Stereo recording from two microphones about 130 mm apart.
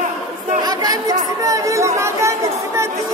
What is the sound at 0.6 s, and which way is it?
Chatter, 30° right (ahead or behind).